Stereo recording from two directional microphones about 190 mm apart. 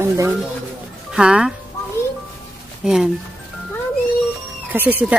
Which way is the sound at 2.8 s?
Centre (ahead or behind).